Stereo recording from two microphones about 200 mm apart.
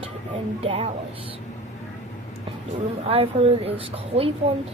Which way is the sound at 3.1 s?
30° right (ahead or behind).